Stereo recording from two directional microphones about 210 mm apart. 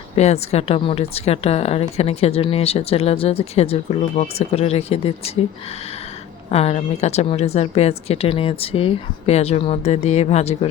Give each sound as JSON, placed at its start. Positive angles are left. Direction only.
{"t": 0.2, "sound": "a woman's voice", "side_deg": 30}
{"t": 6.5, "sound": "a woman's voice", "side_deg": 30}